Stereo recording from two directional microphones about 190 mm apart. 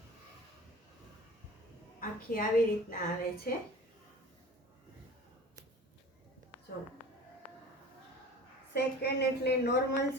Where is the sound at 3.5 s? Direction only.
45° left (ahead or behind).